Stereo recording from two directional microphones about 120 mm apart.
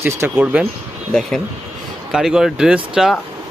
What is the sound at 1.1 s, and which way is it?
Speech, 5° left (ahead or behind).